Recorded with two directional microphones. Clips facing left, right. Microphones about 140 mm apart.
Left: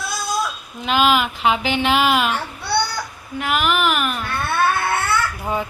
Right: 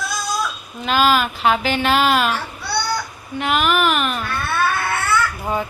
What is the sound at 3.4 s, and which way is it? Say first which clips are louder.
Speech: right 2 dB; 10° left (ahead or behind).